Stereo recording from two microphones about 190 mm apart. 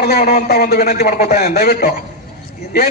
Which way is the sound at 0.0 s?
50° left (ahead or behind).